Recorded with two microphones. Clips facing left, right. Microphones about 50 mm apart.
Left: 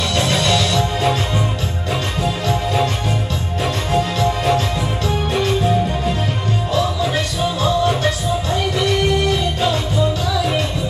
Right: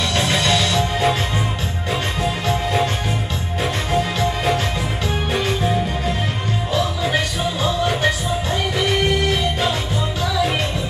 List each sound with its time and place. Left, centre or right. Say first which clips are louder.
0.3 s music: left 1 dB; right
2.2 s music: left 2 dB; right
3.9 s music: left 3 dB; centre